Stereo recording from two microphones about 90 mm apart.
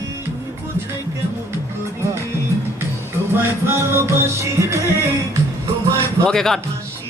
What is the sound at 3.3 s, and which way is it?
Music, 30° right (ahead or behind).